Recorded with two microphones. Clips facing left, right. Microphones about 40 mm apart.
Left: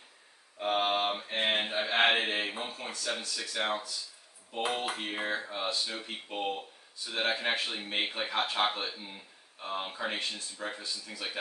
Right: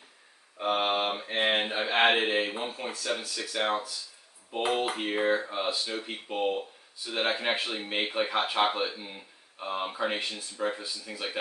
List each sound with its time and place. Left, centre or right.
0.6 s mantra: centre
3.6 s speech: centre
7.8 s speech: centre